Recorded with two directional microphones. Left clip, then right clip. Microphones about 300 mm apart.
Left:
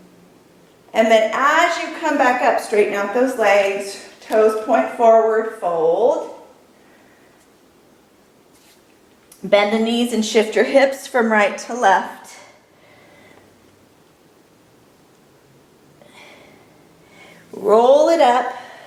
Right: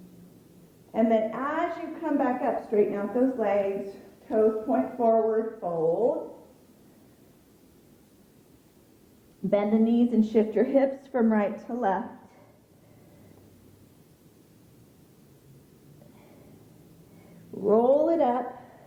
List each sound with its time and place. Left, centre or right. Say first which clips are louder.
0.9 s a woman's voice: left 11 dB; centre
5.9 s a woman's voice: left 9 dB; left
9.5 s a woman's voice: left 9 dB; centre
17.7 s a woman's voice: left 9 dB; centre
18.0 s a sound: left 11 dB; centre